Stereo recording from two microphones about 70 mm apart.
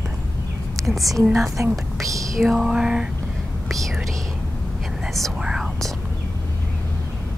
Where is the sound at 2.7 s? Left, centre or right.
Centre.